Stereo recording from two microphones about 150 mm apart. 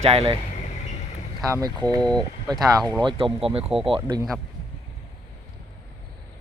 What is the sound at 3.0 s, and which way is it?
Speech, 35° right (ahead or behind).